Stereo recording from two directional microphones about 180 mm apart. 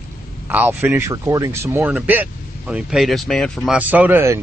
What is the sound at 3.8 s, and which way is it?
Speech, 10° right (ahead or behind).